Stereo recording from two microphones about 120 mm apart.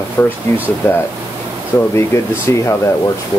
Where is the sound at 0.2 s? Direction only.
20° left (ahead or behind).